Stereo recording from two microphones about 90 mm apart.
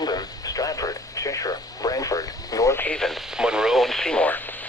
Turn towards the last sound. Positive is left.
turn(degrees=15)  # may be behind; listen again after turning